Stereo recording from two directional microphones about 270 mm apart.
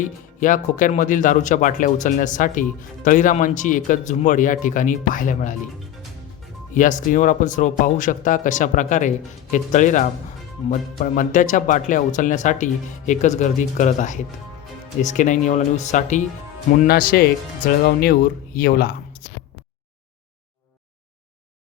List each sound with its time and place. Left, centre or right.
0.0 s speech: left
6.7 s speech: left